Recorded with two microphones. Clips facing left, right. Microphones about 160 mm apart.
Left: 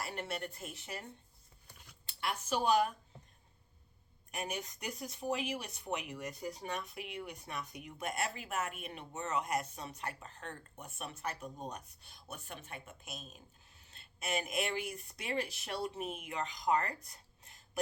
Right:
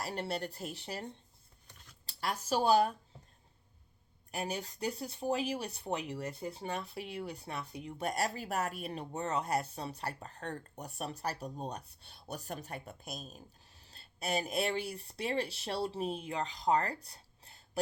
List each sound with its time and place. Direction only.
0.0 s speech: 35° right (ahead or behind)
1.6 s a sound: 10° left (ahead or behind)
2.0 s speech: 35° right (ahead or behind)
4.3 s speech: 35° right (ahead or behind)